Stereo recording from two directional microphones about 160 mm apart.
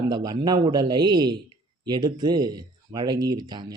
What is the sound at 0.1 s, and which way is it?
Speech, 25° right (ahead or behind).